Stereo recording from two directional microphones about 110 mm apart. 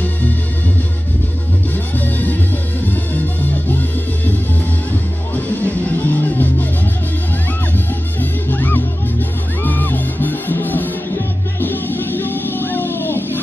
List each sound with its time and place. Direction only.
2.0 s music: 15° left (ahead or behind)
5.3 s music: 15° left (ahead or behind)
7.7 s music: 15° left (ahead or behind)